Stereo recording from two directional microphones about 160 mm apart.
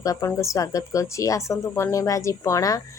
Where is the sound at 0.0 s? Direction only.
20° left (ahead or behind).